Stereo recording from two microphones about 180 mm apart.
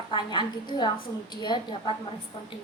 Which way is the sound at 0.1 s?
25° left (ahead or behind).